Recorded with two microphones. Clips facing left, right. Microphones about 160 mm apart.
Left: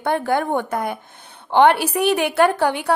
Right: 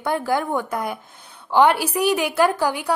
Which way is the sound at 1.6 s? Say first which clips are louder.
Left 2 dB; 60° left (ahead or behind).